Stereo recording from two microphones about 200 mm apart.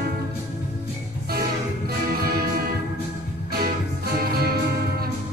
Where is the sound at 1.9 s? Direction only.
50° right (ahead or behind).